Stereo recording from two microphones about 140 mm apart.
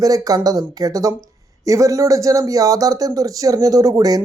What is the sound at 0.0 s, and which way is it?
Speech, 25° right (ahead or behind).